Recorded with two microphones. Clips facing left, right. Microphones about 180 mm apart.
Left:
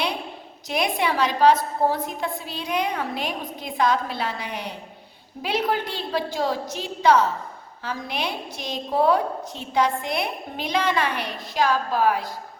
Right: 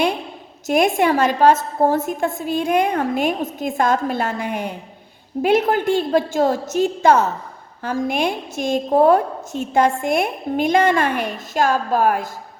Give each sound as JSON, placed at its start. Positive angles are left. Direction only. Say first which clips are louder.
{"t": 0.7, "sound": "a woman's voice", "louder": "right 8 dB", "side_deg": -45}